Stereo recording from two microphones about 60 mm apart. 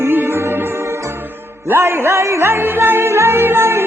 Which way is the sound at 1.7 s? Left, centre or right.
Right.